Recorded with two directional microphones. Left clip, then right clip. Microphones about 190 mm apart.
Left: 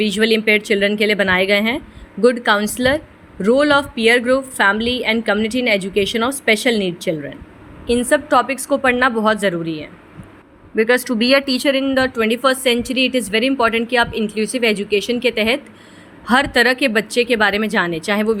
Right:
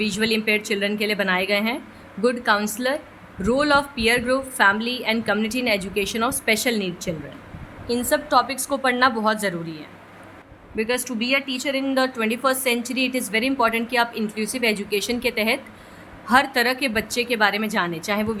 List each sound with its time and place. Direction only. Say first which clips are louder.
0.0 s a woman's voice: left 7 dB; 25° left (ahead or behind)